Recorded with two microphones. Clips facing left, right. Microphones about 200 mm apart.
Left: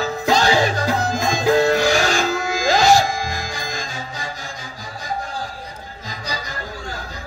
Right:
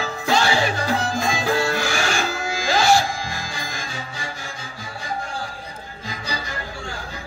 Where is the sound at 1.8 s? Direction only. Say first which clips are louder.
Left 5 dB; 40° left (ahead or behind).